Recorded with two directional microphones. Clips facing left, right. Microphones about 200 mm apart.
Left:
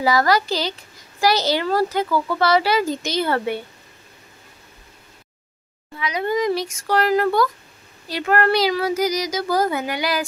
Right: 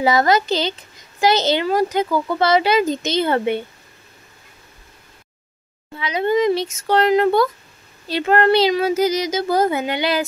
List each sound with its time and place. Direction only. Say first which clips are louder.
0.0 s speech: right 2 dB; 20° right (ahead or behind)
5.9 s speech: right 4 dB; 25° right (ahead or behind)